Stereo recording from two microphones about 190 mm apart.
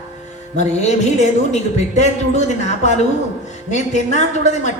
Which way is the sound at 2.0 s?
35° left (ahead or behind).